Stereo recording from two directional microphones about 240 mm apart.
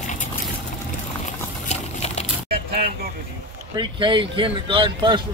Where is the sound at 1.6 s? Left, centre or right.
Left.